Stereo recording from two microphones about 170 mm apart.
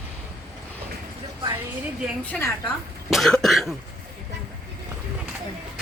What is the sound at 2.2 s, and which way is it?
Speech, 10° left (ahead or behind).